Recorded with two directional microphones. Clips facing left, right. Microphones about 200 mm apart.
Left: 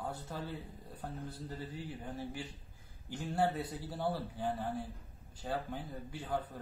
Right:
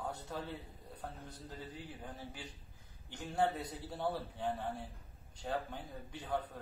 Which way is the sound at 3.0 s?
10° left (ahead or behind).